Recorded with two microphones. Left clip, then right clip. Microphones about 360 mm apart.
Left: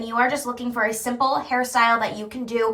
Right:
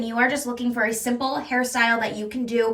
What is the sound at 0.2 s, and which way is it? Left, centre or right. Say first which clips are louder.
A woman's voice: left 1 dB; left.